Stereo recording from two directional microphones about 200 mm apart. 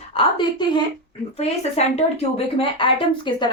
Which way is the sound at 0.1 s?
25° left (ahead or behind).